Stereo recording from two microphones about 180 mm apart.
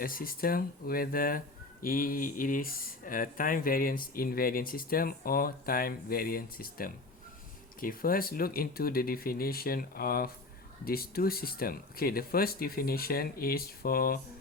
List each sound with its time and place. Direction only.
0.0 s speech: 55° left (ahead or behind)